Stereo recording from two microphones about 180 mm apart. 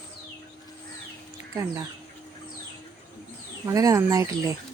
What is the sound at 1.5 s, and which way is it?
Speech, 15° right (ahead or behind).